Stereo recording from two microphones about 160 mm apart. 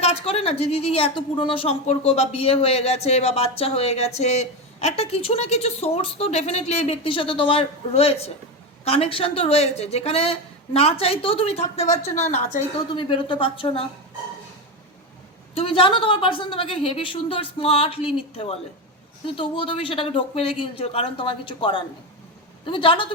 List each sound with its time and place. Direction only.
0.0 s a woman's voice: 40° left (ahead or behind)
12.9 s a woman's voice: 30° left (ahead or behind)
15.5 s a woman's voice: 35° left (ahead or behind)